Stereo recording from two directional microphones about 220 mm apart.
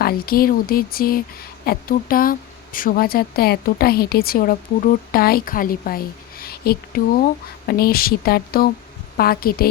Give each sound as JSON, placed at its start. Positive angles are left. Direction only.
{"t": 0.0, "sound": "speech", "side_deg": 45}